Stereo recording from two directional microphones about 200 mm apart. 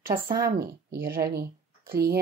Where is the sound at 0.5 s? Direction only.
50° right (ahead or behind).